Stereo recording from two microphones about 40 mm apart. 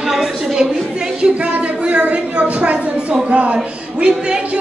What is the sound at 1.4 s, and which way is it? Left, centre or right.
A woman's voice, right.